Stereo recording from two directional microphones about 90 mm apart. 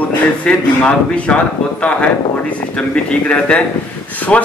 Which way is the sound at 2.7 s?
15° left (ahead or behind).